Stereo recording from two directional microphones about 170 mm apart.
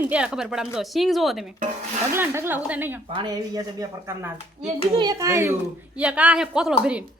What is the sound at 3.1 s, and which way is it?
A woman's voice, 25° right (ahead or behind).